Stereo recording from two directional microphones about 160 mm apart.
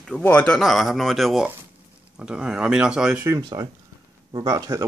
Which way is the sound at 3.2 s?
20° right (ahead or behind).